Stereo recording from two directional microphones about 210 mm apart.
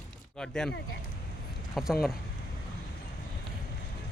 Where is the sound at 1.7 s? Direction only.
Centre (ahead or behind).